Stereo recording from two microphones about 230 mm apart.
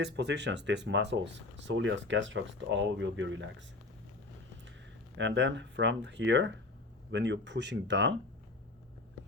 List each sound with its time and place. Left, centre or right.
0.0 s speech: right
5.1 s speech: right